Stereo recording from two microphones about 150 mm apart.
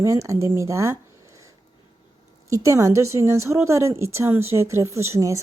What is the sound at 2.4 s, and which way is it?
A woman's voice, 20° right (ahead or behind).